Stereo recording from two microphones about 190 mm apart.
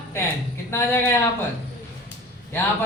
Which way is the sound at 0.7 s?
15° left (ahead or behind).